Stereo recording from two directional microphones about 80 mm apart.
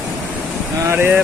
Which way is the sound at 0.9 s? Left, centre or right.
Right.